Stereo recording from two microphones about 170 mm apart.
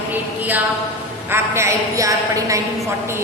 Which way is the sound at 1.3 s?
15° right (ahead or behind).